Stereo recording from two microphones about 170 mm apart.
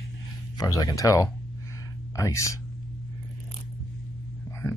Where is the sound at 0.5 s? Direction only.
20° left (ahead or behind).